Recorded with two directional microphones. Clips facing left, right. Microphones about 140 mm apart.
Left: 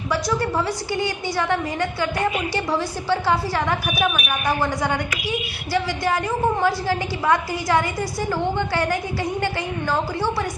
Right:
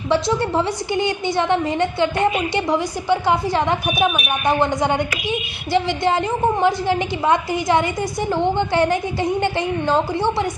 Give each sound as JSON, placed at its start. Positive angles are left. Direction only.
{"t": 0.1, "sound": "a woman's voice", "side_deg": -25}